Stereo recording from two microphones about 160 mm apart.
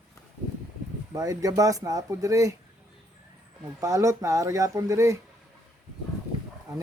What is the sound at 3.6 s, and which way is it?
Speech, 20° right (ahead or behind).